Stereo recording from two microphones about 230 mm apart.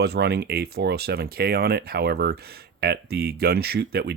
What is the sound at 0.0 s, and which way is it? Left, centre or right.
Speech, right.